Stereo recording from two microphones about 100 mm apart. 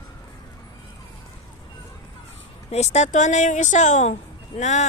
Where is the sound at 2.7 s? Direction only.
90° left.